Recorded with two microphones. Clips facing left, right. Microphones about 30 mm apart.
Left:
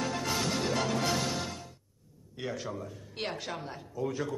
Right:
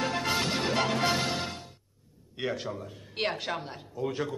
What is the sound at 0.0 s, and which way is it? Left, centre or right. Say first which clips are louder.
Music: right 3 dB; right.